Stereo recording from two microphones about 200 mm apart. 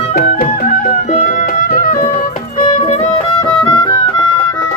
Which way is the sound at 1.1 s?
40° left (ahead or behind).